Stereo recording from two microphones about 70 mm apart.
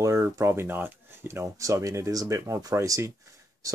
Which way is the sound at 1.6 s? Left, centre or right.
Right.